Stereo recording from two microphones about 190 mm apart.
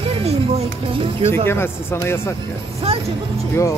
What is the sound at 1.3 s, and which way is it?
Speech, 10° left (ahead or behind).